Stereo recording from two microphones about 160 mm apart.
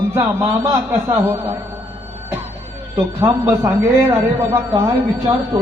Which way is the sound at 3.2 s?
15° right (ahead or behind).